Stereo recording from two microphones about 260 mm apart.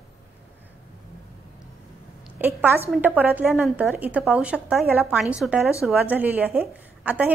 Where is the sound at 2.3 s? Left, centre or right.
Centre.